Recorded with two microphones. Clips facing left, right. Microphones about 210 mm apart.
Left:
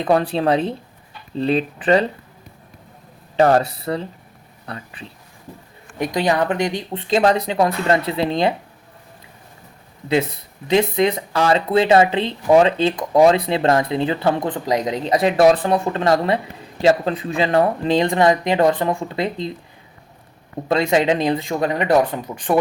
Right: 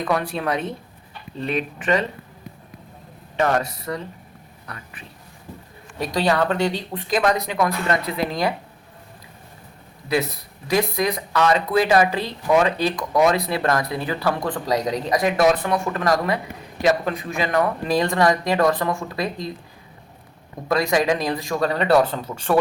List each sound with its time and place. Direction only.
0.0 s speech: 30° left (ahead or behind)
3.3 s speech: 35° left (ahead or behind)
6.0 s speech: 20° left (ahead or behind)
10.1 s speech: 25° left (ahead or behind)
20.7 s speech: 25° left (ahead or behind)